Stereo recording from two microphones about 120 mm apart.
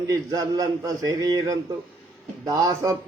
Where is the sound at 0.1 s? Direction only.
30° right (ahead or behind).